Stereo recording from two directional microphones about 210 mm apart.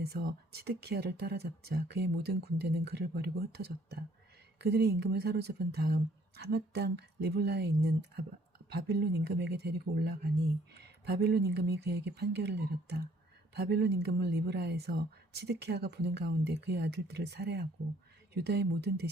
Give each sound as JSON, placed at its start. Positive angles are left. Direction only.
{"t": 0.0, "sound": "a woman's voice", "side_deg": -50}
{"t": 4.5, "sound": "a woman's voice", "side_deg": -50}